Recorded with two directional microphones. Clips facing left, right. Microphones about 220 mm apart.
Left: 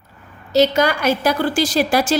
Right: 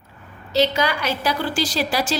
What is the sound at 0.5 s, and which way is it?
A woman's voice, 45° left (ahead or behind).